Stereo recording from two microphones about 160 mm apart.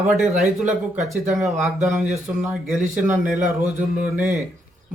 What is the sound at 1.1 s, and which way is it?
Speech, 15° right (ahead or behind).